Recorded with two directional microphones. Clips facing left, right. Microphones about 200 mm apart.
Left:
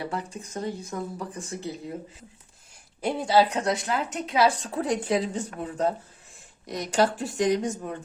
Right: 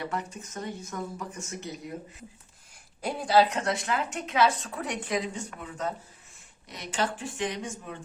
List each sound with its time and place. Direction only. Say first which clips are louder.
0.0 s a woman's voice: left 2 dB; 30° left (ahead or behind)
3.0 s a woman's voice: left 1 dB; 25° left (ahead or behind); by 7.9 s 40° left (ahead or behind)